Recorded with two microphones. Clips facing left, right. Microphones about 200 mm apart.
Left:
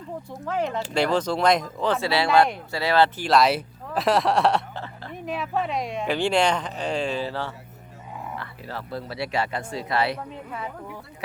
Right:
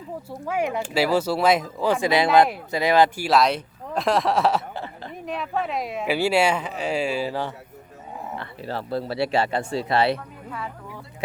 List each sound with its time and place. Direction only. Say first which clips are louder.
0.3 s speech: right 2 dB; 10° right (ahead or behind)
3.2 s speech: even; centre (ahead or behind)
4.7 s a sound: right 2 dB; 15° right (ahead or behind)
5.1 s speech: left 1 dB; centre (ahead or behind)
8.4 s speech: right 4 dB; 30° right (ahead or behind)